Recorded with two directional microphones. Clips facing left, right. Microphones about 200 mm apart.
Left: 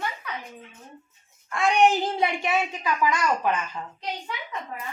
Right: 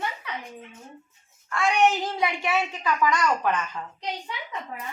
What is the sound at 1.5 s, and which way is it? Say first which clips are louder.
Speech: left 1 dB; 20° left (ahead or behind).